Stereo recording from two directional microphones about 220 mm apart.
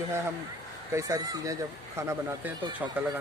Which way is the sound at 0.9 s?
15° right (ahead or behind).